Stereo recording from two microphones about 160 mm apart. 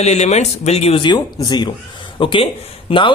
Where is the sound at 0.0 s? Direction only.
45° left (ahead or behind).